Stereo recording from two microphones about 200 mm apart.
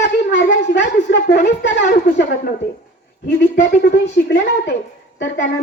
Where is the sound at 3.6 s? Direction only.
55° left (ahead or behind).